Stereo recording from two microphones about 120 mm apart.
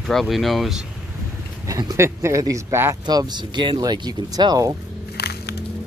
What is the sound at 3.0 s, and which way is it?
Speech, 35° right (ahead or behind).